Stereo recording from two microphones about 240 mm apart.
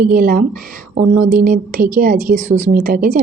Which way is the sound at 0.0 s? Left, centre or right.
Right.